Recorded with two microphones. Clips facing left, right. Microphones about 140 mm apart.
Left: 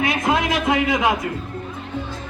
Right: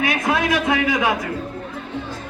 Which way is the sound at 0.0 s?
25° left (ahead or behind).